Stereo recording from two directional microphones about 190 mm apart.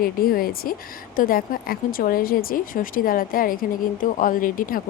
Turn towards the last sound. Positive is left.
turn(degrees=45)  # may be behind; listen again after turning